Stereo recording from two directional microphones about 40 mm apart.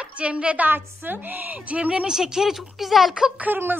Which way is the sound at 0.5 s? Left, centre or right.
Right.